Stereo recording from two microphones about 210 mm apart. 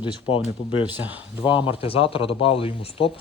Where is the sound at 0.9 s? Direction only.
10° right (ahead or behind).